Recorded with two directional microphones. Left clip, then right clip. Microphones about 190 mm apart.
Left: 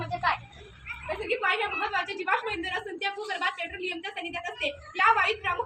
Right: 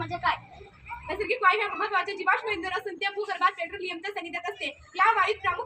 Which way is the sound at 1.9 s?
15° right (ahead or behind).